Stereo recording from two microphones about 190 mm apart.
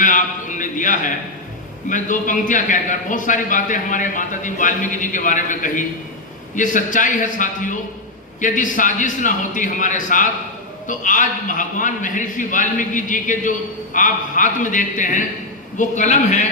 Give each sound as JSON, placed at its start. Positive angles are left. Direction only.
{"t": 0.0, "sound": "a man's voice", "side_deg": 40}